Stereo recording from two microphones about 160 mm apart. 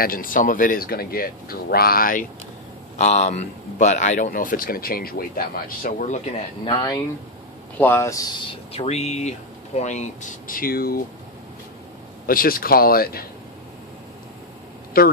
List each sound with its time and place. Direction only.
0.0 s speech: 60° left (ahead or behind)
3.0 s a man's voice: 45° left (ahead or behind)
7.7 s a man's voice: 15° left (ahead or behind)
8.7 s a man's voice: 40° left (ahead or behind); by 11.0 s 65° left (ahead or behind)
12.3 s speech: 65° left (ahead or behind)
15.0 s speech: 70° left (ahead or behind)